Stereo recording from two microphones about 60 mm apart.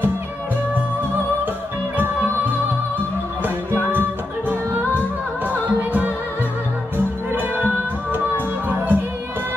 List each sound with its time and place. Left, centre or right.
3.9 s music: right
8.6 s music: right